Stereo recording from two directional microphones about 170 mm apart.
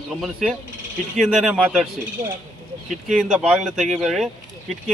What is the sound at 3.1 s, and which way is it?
Speech, 5° right (ahead or behind).